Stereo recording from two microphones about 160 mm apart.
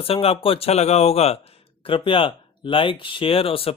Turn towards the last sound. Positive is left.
turn(degrees=35)  # may be behind; listen again after turning